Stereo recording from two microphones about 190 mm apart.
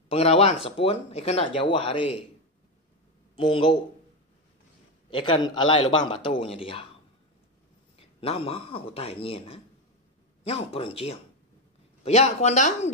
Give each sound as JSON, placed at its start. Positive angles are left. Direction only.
{"t": 0.1, "sound": "speech", "side_deg": 35}
{"t": 3.3, "sound": "a man's voice", "side_deg": 25}
{"t": 5.1, "sound": "a man's voice", "side_deg": 25}
{"t": 8.0, "sound": "a man's voice", "side_deg": 30}